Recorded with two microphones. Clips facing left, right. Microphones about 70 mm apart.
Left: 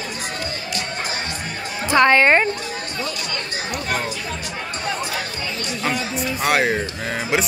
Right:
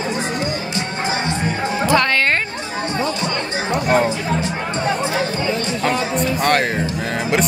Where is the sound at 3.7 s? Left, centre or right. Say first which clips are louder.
Right 9 dB; right.